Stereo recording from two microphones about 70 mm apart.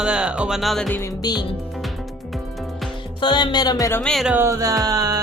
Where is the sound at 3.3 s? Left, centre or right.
Left.